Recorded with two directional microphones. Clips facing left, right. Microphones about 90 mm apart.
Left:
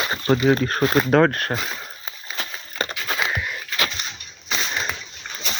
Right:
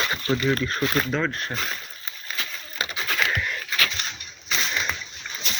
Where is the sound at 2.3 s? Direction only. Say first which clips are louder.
Left 3 dB; 40° left (ahead or behind).